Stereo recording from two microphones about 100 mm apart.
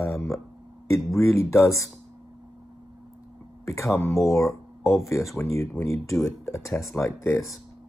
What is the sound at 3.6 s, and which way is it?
Speech, 30° left (ahead or behind).